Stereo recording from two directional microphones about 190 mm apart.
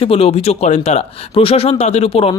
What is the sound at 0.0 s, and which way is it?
Speech, 30° left (ahead or behind).